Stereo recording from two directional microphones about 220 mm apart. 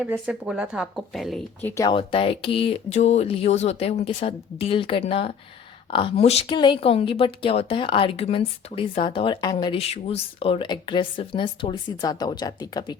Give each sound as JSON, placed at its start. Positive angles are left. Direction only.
{"t": 0.0, "sound": "speech", "side_deg": -5}
{"t": 1.7, "sound": "a woman's voice", "side_deg": 20}